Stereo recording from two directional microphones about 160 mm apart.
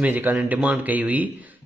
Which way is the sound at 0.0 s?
10° right (ahead or behind).